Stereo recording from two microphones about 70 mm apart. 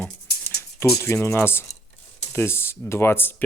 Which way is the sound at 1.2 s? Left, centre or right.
Left.